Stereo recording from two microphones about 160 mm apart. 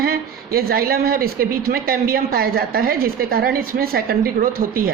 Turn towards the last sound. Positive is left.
turn(degrees=-65)  # may be behind; listen again after turning